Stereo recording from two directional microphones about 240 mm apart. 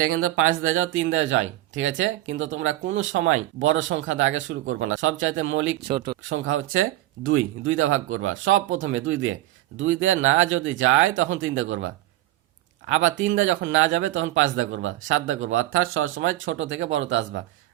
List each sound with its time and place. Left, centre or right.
0.0 s speech: right
5.9 s speech: right
6.3 s speech: right